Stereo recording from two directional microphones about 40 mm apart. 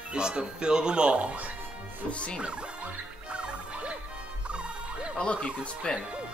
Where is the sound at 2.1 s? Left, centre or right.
Left.